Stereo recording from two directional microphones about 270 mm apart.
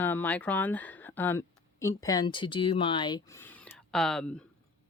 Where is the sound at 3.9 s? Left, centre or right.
Centre.